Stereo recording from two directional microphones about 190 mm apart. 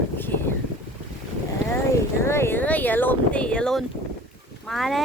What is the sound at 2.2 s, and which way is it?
Speech, 15° left (ahead or behind).